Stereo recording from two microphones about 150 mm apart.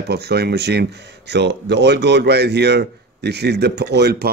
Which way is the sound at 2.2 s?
90° right.